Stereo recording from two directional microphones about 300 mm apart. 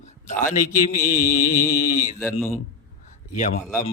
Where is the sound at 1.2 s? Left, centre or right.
Left.